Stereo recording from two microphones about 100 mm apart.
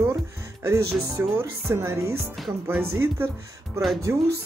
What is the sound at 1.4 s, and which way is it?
Speech, 25° right (ahead or behind).